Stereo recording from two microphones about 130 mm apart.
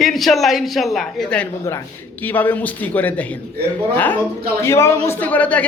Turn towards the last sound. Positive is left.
turn(degrees=10)  # may be behind; listen again after turning